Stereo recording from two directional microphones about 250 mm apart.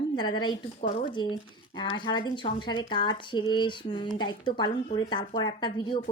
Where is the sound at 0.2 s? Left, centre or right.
Centre.